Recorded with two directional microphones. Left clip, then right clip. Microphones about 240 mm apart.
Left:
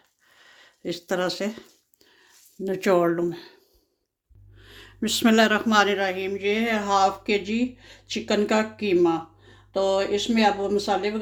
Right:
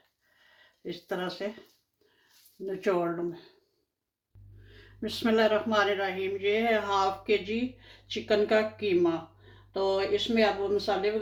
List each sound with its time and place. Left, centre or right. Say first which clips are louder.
0.5 s speech: left 8 dB; left
2.6 s a man's voice: left 8 dB; left
4.7 s a man's voice: left 9 dB; left